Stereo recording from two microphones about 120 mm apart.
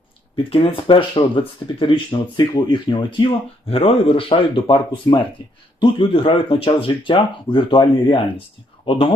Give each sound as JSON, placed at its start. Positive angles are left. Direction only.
{"t": 0.5, "sound": "speech", "side_deg": 45}